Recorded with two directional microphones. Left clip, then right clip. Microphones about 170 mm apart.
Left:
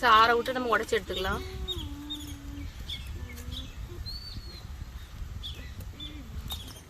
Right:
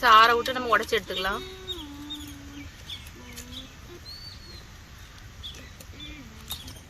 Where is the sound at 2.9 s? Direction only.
Centre (ahead or behind).